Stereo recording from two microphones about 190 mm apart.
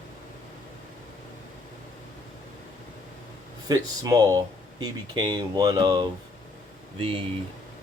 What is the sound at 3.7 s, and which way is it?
Speech, 20° right (ahead or behind).